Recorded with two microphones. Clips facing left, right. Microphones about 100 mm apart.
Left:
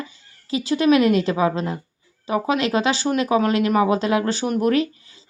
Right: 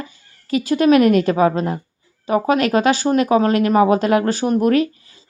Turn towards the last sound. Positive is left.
turn(degrees=-45)  # may be behind; listen again after turning